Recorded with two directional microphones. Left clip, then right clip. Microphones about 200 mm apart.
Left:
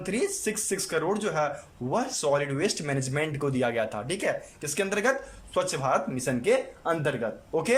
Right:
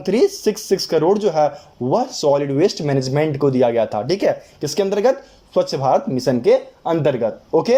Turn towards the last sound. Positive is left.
turn(degrees=-15)  # may be behind; listen again after turning